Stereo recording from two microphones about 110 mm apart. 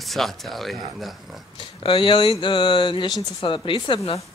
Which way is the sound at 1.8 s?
50° left (ahead or behind).